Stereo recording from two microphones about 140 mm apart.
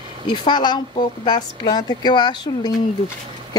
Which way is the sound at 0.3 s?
35° left (ahead or behind).